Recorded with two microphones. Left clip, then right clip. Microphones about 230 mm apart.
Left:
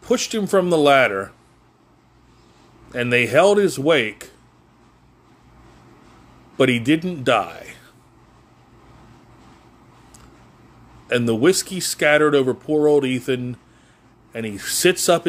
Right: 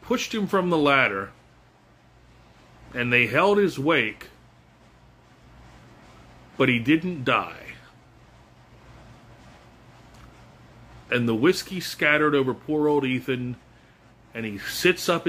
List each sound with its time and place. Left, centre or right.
0.0 s speech: left
2.9 s a man's voice: left
6.5 s a man's voice: left
11.1 s a man's voice: left